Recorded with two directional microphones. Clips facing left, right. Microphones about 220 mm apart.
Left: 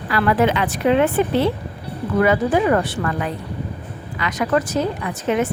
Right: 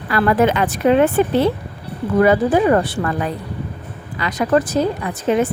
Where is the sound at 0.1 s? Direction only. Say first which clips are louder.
Right 2 dB; 45° right (ahead or behind).